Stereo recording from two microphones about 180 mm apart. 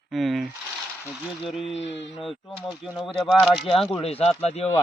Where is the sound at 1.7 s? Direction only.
85° left.